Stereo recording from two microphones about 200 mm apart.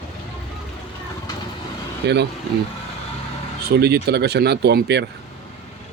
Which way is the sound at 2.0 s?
60° right (ahead or behind).